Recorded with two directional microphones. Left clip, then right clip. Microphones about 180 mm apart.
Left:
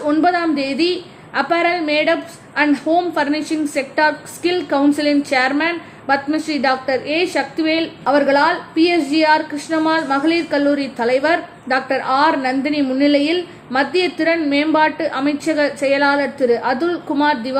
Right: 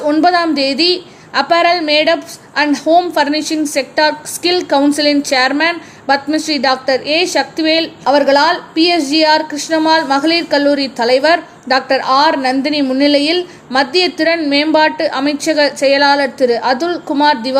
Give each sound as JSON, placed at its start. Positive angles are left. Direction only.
{"t": 0.0, "sound": "a woman's voice", "side_deg": -30}